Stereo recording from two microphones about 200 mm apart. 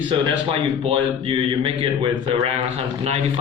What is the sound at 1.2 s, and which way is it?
A man's voice, 25° right (ahead or behind).